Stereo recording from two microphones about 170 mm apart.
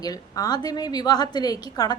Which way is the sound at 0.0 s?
20° left (ahead or behind).